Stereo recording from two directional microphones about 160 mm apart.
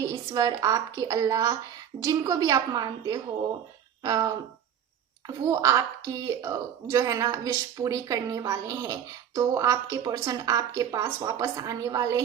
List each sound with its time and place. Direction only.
0.0 s a woman's voice: 20° right (ahead or behind)
5.5 s a woman's voice: 20° right (ahead or behind)